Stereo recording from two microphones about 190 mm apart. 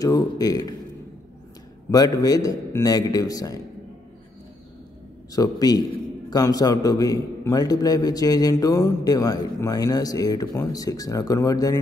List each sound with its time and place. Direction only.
0.0 s a man's voice: 20° left (ahead or behind)
1.9 s a man's voice: 20° left (ahead or behind)
5.3 s a man's voice: 20° left (ahead or behind)